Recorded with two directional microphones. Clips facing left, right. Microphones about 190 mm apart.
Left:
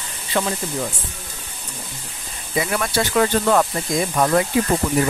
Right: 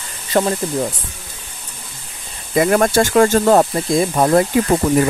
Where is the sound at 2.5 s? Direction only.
50° right (ahead or behind); by 4.4 s 30° right (ahead or behind).